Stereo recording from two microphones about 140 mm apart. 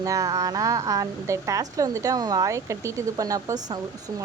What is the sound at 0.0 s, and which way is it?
A woman's voice, 25° right (ahead or behind).